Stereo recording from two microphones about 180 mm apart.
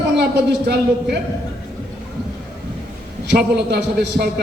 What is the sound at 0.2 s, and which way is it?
Speech, 65° right (ahead or behind).